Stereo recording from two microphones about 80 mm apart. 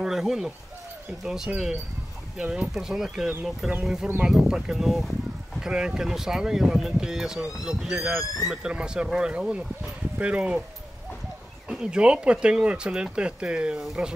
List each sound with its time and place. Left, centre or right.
0.0 s speech: centre
11.7 s speech: centre